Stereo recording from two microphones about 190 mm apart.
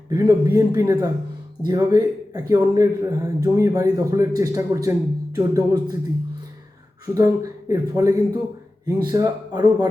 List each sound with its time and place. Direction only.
0.1 s speech: 15° right (ahead or behind)
7.1 s speech: 15° right (ahead or behind)